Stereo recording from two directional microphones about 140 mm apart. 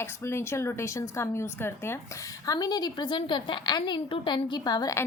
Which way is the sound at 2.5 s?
30° left (ahead or behind).